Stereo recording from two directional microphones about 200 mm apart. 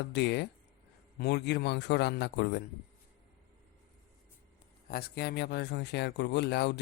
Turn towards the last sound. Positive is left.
turn(degrees=55)  # may be behind; listen again after turning